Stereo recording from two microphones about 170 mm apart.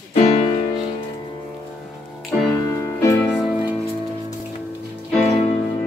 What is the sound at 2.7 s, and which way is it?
Music, 20° left (ahead or behind).